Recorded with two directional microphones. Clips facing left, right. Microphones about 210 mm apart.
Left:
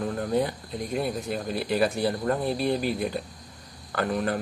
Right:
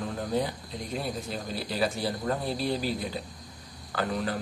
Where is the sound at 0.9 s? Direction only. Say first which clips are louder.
Left 5 dB; 55° left (ahead or behind).